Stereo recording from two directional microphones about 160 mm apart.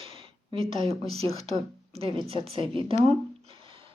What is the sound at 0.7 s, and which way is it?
Speech, 40° right (ahead or behind).